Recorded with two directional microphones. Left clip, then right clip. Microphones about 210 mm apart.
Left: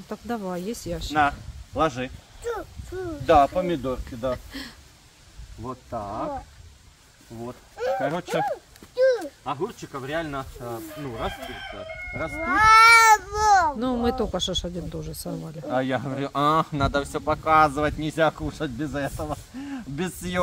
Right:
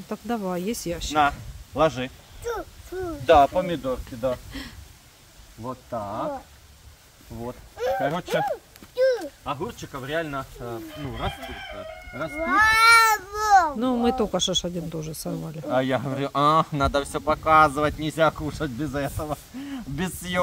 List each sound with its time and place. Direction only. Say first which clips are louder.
0.1 s speech: right 2 dB; 15° right (ahead or behind)
3.3 s speech: right 1 dB; 35° right (ahead or behind)
4.3 s speech: left 1 dB; centre (ahead or behind)
5.6 s speech: right 1 dB; 25° right (ahead or behind)
7.7 s a sound: even; centre (ahead or behind)
8.0 s speech: right 1 dB; 10° right (ahead or behind)
8.5 s a sound: even; 5° left (ahead or behind)
9.5 s speech: left 1 dB; 25° right (ahead or behind)
12.4 s speech: left 3 dB; 20° left (ahead or behind)
13.7 s speech: right 2 dB; 10° right (ahead or behind)
15.7 s speech: right 2 dB; 30° right (ahead or behind)
19.7 s speech: even; 25° right (ahead or behind)